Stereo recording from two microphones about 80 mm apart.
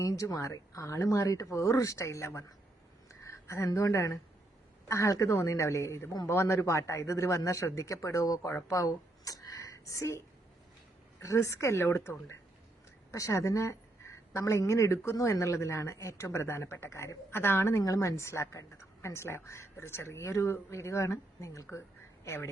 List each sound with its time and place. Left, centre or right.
0.0 s speech: left
8.7 s a sound: left
11.2 s a woman's voice: left
17.8 s speech: left